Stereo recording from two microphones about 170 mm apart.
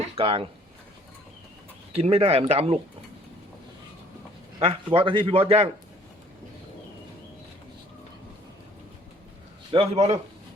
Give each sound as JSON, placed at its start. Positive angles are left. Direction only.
{"t": 0.2, "sound": "speech", "side_deg": -35}
{"t": 1.9, "sound": "a man's voice", "side_deg": -35}
{"t": 4.6, "sound": "a man's voice", "side_deg": -35}
{"t": 9.7, "sound": "a man's voice", "side_deg": -40}